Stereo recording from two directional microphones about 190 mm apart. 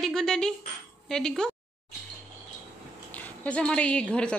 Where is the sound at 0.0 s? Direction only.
Centre (ahead or behind).